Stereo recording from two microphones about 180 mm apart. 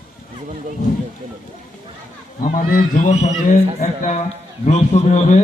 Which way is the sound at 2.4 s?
50° left (ahead or behind).